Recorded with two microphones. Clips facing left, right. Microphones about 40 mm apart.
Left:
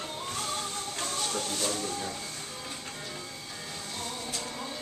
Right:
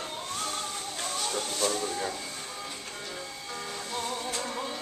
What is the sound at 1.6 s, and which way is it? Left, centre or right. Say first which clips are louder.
Speech: right 3 dB; centre.